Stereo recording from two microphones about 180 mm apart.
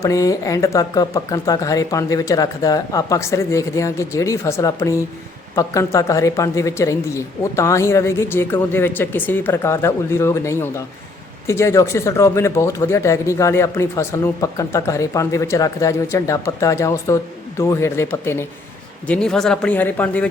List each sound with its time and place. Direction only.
0.0 s speech: 20° left (ahead or behind)